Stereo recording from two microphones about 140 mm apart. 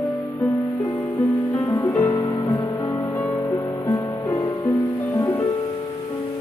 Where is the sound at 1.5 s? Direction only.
25° left (ahead or behind).